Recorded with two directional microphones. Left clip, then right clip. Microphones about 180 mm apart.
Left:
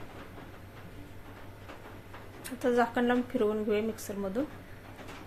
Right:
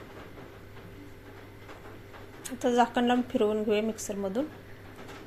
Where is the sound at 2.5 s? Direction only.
10° right (ahead or behind).